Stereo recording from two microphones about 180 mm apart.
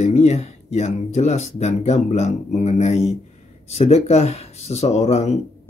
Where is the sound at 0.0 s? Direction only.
40° left (ahead or behind).